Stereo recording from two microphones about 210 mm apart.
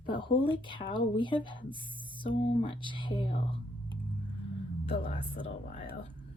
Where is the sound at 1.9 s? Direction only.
25° right (ahead or behind).